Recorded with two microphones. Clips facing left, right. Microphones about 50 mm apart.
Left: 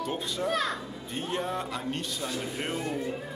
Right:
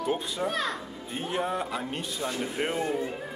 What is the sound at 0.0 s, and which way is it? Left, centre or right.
Speech, centre.